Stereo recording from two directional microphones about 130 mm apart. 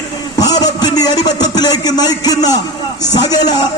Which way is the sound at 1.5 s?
30° left (ahead or behind).